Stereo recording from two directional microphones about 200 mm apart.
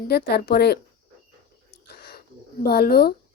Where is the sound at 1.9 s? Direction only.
50° left (ahead or behind).